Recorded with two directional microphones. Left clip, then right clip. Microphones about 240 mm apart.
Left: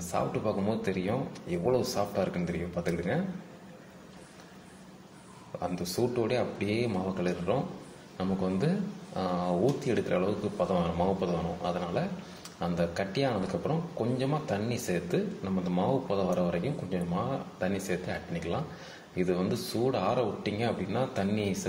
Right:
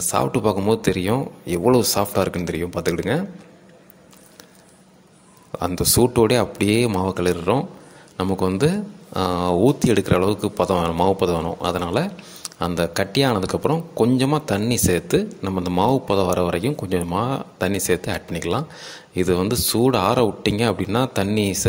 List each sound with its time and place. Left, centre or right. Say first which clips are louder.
0.1 s speech: right 10 dB; right
5.6 s speech: right 12 dB; right